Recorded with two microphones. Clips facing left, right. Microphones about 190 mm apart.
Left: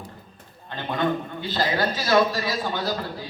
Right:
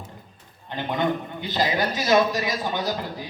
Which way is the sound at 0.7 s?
20° right (ahead or behind).